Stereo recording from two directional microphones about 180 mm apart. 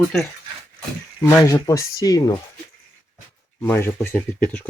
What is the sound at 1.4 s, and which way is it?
Speech, 20° left (ahead or behind).